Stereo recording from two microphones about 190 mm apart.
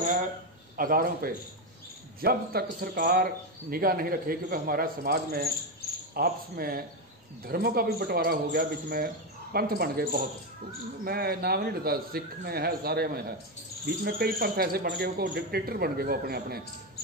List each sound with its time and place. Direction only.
0.7 s a man's voice: 50° right (ahead or behind)